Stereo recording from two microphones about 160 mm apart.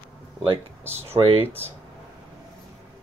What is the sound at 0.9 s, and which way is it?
Speech, 40° right (ahead or behind).